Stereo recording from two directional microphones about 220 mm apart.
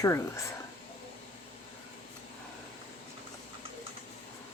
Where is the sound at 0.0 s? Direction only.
15° left (ahead or behind).